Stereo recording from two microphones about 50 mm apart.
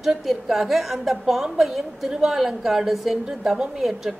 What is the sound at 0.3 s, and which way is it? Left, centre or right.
A woman's voice, centre.